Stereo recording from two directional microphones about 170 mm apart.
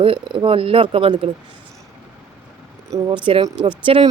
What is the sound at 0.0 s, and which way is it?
Speech, 30° right (ahead or behind).